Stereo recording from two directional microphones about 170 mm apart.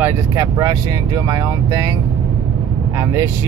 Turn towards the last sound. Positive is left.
turn(degrees=-15)  # may be behind; listen again after turning